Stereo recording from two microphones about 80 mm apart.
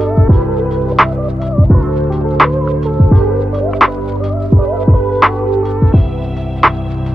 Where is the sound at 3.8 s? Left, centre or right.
Centre.